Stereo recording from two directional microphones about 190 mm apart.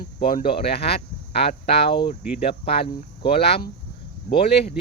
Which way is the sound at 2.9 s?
30° left (ahead or behind).